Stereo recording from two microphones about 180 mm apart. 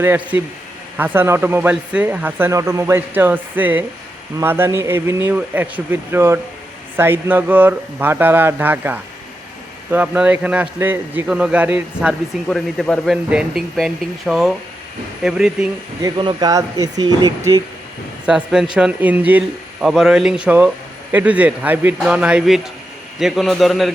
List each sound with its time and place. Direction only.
0.0 s a man's voice: 10° right (ahead or behind)
16.0 s speech: 25° right (ahead or behind)
18.3 s a man's voice: 5° right (ahead or behind)